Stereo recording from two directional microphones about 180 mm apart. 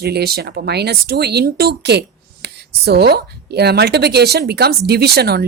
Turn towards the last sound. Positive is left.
turn(degrees=-60)  # may be behind; listen again after turning